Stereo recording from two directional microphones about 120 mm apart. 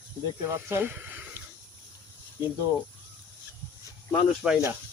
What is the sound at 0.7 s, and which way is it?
Speech, 20° right (ahead or behind).